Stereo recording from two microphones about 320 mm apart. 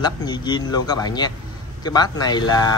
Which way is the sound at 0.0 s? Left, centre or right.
Centre.